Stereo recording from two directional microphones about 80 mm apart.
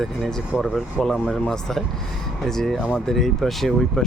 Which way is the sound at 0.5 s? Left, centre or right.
Centre.